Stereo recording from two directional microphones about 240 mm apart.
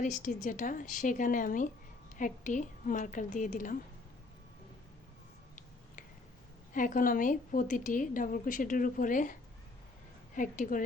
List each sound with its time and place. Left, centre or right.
0.0 s a woman's voice: left
6.7 s a woman's voice: left